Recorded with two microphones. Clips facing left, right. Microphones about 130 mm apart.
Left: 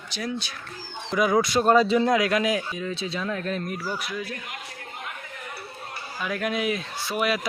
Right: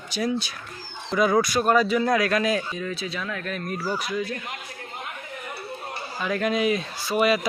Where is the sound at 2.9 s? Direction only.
30° left (ahead or behind).